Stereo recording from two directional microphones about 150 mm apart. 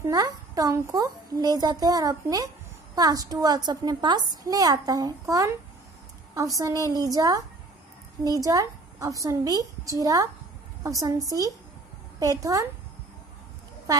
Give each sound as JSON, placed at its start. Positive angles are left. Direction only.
{"t": 0.0, "sound": "a woman's voice", "side_deg": -25}